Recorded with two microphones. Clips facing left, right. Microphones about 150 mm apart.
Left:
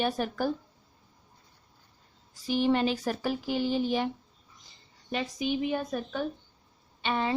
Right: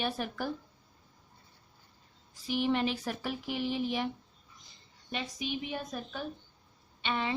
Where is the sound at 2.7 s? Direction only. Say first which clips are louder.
Left 4 dB; 40° left (ahead or behind).